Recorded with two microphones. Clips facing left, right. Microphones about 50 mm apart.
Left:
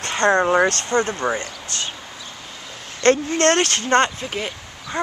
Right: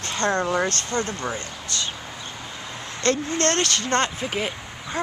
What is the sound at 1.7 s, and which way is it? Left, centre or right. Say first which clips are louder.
Speech: even; left.